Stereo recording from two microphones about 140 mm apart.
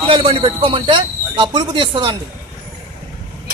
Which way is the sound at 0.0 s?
40° right (ahead or behind).